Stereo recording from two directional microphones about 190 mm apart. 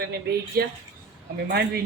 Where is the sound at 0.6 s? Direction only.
55° right (ahead or behind).